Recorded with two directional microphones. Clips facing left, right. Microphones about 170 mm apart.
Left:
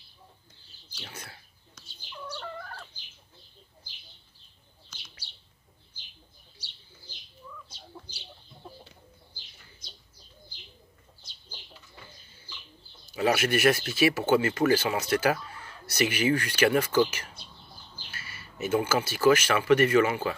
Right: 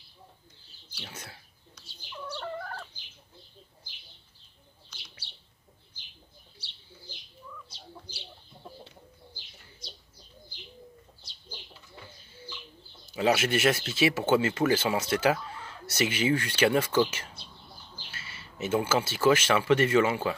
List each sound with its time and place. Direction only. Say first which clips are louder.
0.9 s speech: even; 20° right (ahead or behind)
4.8 s bird: left 1 dB; 45° left (ahead or behind)
13.1 s speech: even; 20° right (ahead or behind)
18.1 s speech: left 2 dB; 25° right (ahead or behind)